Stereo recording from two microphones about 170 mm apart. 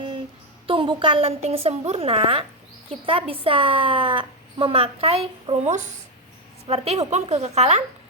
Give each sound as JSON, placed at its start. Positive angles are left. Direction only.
{"t": 0.7, "sound": "a woman's voice", "side_deg": -30}